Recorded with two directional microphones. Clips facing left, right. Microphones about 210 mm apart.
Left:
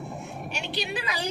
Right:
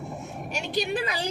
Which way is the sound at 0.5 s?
45° right (ahead or behind).